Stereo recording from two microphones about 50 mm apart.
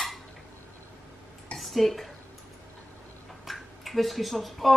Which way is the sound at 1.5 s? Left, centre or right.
Centre.